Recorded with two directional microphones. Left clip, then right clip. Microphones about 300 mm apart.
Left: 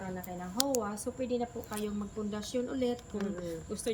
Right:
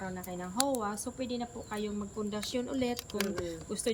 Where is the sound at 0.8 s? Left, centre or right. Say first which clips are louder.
Left 1 dB; centre.